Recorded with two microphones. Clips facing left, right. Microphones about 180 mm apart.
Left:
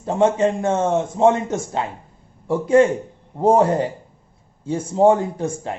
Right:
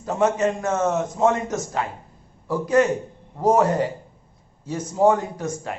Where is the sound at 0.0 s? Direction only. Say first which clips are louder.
Left 3 dB; 30° left (ahead or behind).